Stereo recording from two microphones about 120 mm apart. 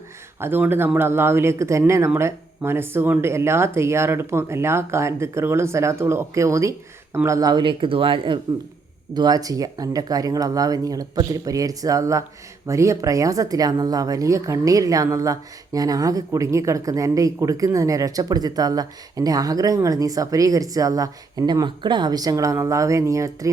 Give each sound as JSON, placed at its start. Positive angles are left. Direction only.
{"t": 0.3, "sound": "speech", "side_deg": -20}
{"t": 9.1, "sound": "speech", "side_deg": -35}